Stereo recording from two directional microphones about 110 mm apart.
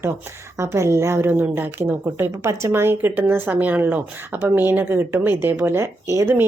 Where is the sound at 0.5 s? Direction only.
25° right (ahead or behind).